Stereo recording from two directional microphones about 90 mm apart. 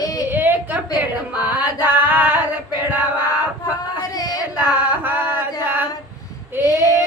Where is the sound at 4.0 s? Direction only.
45° left (ahead or behind).